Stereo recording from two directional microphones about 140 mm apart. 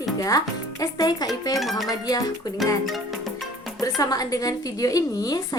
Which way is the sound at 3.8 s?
25° left (ahead or behind).